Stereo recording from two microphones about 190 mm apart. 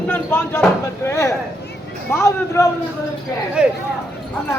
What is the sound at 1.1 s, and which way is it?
A woman's voice, 15° left (ahead or behind).